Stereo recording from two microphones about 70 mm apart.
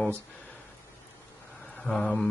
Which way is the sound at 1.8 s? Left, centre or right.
Centre.